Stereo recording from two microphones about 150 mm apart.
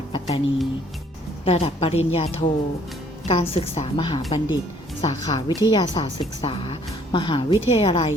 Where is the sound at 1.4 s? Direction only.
40° left (ahead or behind).